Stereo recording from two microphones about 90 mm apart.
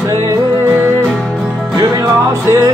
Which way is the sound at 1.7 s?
35° right (ahead or behind).